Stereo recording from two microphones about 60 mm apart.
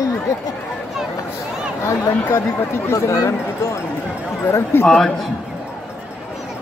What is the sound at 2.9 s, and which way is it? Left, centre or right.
Speech, left.